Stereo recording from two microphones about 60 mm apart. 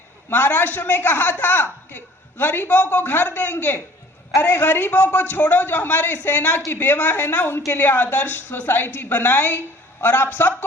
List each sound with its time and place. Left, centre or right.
0.3 s a man's voice: left